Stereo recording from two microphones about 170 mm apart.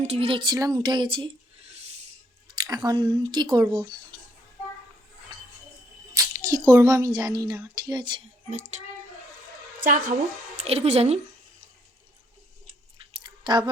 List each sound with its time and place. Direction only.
0.0 s speech: 35° right (ahead or behind)
2.5 s speech: 25° right (ahead or behind)
6.1 s speech: 20° right (ahead or behind)
8.4 s speech: 45° right (ahead or behind)
10.6 s speech: 35° right (ahead or behind)
13.1 s chewing: 25° right (ahead or behind)